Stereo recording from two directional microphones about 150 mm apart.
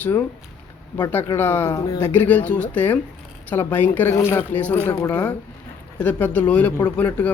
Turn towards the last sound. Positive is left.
turn(degrees=10)  # may be behind; listen again after turning